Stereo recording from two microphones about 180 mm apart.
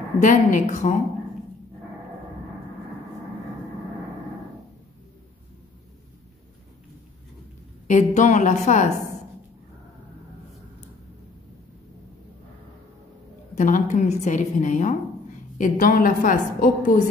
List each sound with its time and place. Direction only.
0.2 s a woman's voice: 45° left (ahead or behind)
7.9 s a woman's voice: 45° left (ahead or behind)
13.6 s a woman's voice: 45° left (ahead or behind)